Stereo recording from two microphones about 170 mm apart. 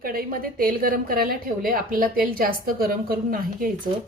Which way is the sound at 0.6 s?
55° right (ahead or behind).